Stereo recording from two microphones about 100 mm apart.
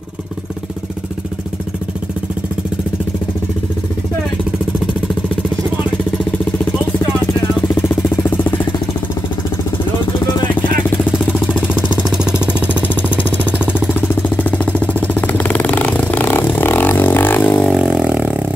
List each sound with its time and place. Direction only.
7.9 s vehicle: 20° left (ahead or behind)
10.5 s vehicle: 20° left (ahead or behind)
11.7 s jackhammer: 10° right (ahead or behind)
13.4 s vehicle: 15° right (ahead or behind)
13.9 s vehicle: 15° left (ahead or behind)
17.7 s vehicle: 5° right (ahead or behind)